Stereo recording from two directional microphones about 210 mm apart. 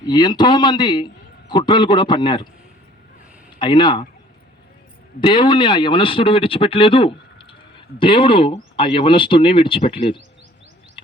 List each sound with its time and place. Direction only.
0.0 s a man's voice: 20° left (ahead or behind)
3.6 s a man's voice: 20° left (ahead or behind)
5.2 s a man's voice: 20° left (ahead or behind)